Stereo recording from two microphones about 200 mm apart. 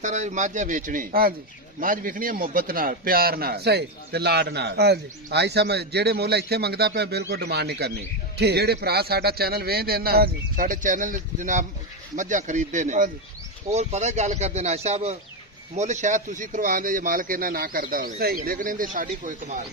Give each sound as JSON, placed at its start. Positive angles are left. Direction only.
{"t": 0.0, "sound": "a man's voice", "side_deg": -35}